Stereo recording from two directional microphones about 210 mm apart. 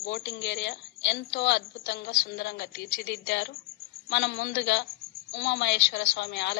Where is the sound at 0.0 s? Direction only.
55° left (ahead or behind).